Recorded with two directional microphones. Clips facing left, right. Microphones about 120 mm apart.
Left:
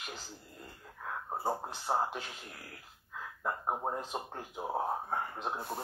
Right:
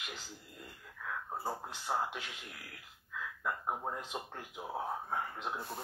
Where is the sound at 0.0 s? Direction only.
35° left (ahead or behind).